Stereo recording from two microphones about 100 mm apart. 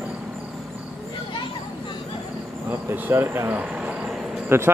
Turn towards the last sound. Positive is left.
turn(degrees=-25)  # may be behind; listen again after turning